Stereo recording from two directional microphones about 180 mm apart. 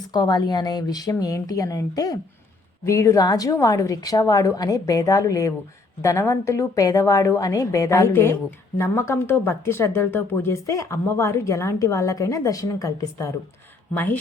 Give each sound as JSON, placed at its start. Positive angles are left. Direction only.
{"t": 0.1, "sound": "a woman's voice", "side_deg": 25}